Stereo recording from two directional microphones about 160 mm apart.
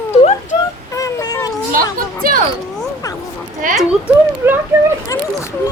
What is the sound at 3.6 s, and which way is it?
Speech, 55° right (ahead or behind).